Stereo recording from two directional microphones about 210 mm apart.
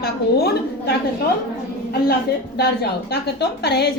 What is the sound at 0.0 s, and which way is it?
Speech, 50° left (ahead or behind).